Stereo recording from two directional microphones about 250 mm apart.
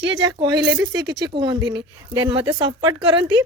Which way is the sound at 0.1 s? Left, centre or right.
Centre.